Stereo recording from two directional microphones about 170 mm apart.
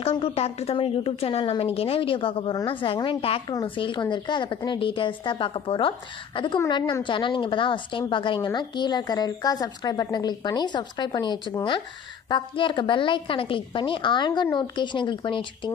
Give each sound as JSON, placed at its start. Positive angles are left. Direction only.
{"t": 0.0, "sound": "a woman's voice", "side_deg": 35}